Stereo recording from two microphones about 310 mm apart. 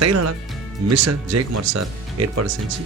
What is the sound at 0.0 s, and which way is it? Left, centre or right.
Speech, right.